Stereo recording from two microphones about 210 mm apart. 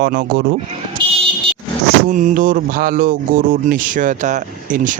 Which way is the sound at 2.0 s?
40° right (ahead or behind).